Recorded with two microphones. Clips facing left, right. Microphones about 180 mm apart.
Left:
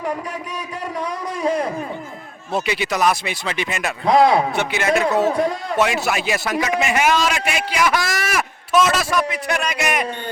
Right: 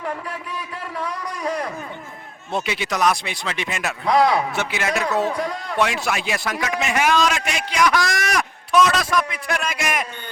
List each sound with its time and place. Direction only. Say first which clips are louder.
0.9 s a man's voice: left 2 dB; 20° left (ahead or behind)
2.5 s a man's voice: left 3 dB; centre (ahead or behind)
4.0 s a man's voice: left 3 dB; 25° left (ahead or behind)
4.5 s a man's voice: left 4 dB; centre (ahead or behind)